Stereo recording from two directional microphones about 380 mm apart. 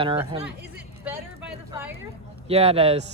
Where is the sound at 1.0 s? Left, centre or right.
Centre.